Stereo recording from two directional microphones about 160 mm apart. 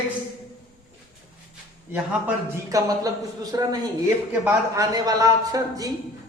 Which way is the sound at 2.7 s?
20° right (ahead or behind).